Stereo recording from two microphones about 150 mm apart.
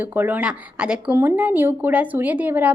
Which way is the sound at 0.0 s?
15° right (ahead or behind).